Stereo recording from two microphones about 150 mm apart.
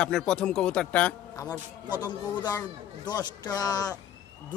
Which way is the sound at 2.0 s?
25° left (ahead or behind).